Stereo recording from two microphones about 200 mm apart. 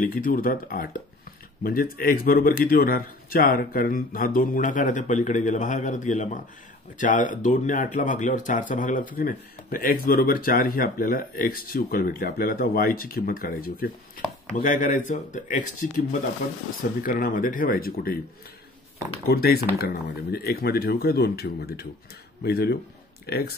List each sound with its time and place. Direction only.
0.0 s speech: 45° left (ahead or behind)
19.2 s speech: 50° left (ahead or behind)